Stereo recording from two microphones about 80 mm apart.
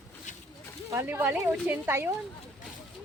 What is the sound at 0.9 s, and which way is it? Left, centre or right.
Speech, right.